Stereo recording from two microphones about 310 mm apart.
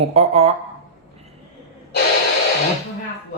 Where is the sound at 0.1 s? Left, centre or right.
Centre.